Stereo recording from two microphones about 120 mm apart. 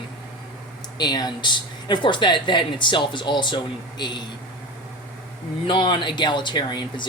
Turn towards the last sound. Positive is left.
turn(degrees=40)  # may be behind; listen again after turning